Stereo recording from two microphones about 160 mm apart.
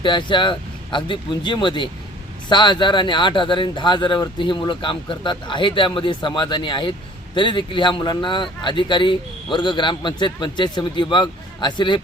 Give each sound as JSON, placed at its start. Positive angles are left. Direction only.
{"t": 0.0, "sound": "speech", "side_deg": 30}